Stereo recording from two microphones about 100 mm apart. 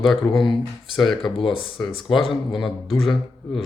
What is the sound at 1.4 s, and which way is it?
Speech, 60° left (ahead or behind).